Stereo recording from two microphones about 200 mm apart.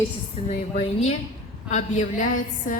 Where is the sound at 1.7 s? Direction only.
35° left (ahead or behind).